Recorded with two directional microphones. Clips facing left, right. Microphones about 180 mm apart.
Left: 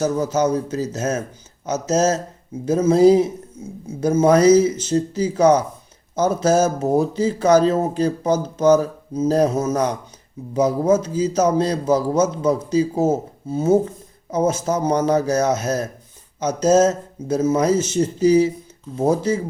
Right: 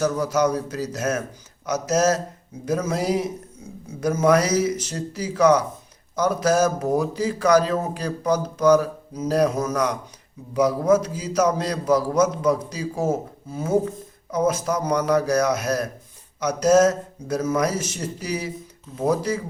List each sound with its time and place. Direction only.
0.0 s a man's voice: 25° left (ahead or behind)